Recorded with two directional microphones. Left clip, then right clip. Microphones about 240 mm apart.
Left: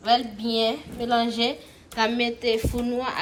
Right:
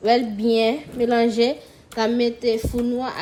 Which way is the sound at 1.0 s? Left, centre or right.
Right.